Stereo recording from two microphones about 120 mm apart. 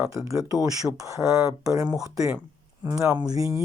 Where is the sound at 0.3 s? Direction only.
30° right (ahead or behind).